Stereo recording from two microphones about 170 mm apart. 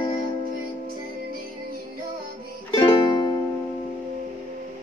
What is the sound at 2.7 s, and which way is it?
Music, 25° left (ahead or behind).